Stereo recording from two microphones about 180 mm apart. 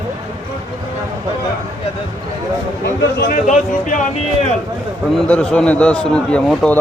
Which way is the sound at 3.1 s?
50° left (ahead or behind).